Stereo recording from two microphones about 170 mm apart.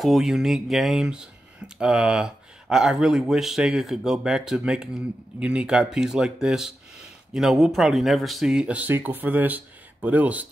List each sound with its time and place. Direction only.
0.0 s speech: centre (ahead or behind)